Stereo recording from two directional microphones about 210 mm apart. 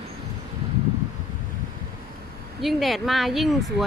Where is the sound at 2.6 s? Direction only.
Centre (ahead or behind).